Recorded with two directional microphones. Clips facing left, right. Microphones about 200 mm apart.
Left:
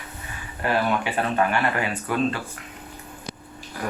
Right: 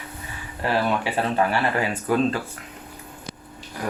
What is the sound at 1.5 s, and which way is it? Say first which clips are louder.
Speech: right 1 dB; 35° right (ahead or behind).